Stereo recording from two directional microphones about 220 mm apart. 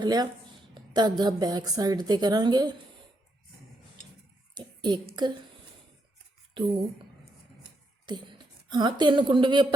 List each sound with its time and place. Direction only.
0.0 s speech: 20° right (ahead or behind)
0.7 s a sound: 20° right (ahead or behind)
1.2 s a woman's voice: 20° right (ahead or behind)
4.5 s a woman's voice: 20° right (ahead or behind)
8.1 s a woman's voice: 20° right (ahead or behind)